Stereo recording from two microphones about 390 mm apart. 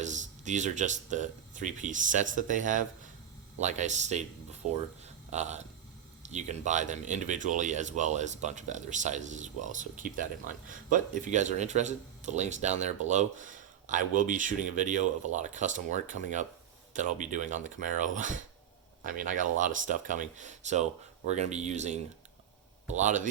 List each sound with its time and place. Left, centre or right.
0.0 s speech: centre
5.0 s a sound: centre
6.2 s speech: centre
23.0 s speech: centre